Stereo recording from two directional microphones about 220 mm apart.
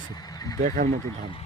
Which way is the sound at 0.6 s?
35° right (ahead or behind).